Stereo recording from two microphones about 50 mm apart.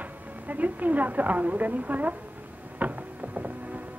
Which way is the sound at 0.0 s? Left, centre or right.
Right.